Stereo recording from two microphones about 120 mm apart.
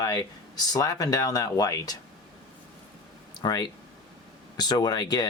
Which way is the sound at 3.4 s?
35° left (ahead or behind).